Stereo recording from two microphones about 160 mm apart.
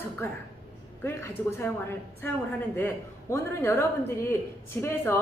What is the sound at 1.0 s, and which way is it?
A woman's voice, 15° left (ahead or behind).